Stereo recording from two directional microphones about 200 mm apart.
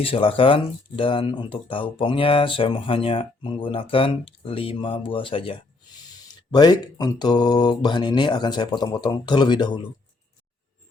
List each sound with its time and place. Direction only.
0.0 s speech: 25° left (ahead or behind)